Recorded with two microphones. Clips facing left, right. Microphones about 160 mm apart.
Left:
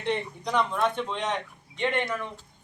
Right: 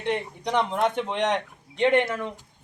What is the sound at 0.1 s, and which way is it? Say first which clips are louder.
A man's voice: right 2 dB; 20° right (ahead or behind).